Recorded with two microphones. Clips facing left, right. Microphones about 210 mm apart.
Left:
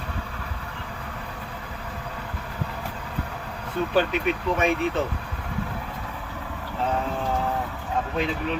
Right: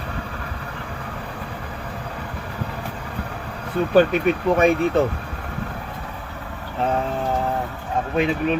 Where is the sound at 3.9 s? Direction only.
50° right (ahead or behind).